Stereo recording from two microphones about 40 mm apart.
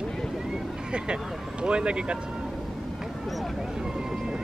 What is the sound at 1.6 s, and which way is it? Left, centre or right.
Vehicle, right.